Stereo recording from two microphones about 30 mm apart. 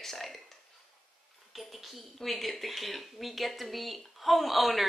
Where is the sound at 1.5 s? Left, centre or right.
Centre.